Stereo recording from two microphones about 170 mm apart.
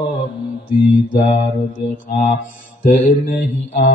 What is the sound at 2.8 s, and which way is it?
Mantra, 50° left (ahead or behind).